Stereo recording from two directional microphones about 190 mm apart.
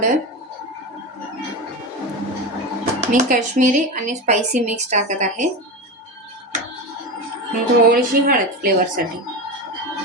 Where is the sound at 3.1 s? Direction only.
40° right (ahead or behind).